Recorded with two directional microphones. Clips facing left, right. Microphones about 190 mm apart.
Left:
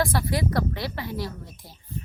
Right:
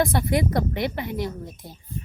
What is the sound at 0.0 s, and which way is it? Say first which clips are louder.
A woman's voice: right 3 dB; 20° right (ahead or behind).